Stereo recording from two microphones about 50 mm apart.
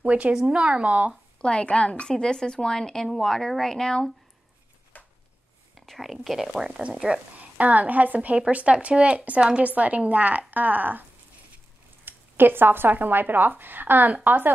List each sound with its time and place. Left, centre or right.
0.0 s speech: right
0.3 s speech: centre
0.6 s speech: right
1.4 s a woman's voice: left
4.9 s a sound: left
5.8 s a sound: centre
6.2 s speech: centre
6.8 s speech: centre
7.3 s a woman's voice: right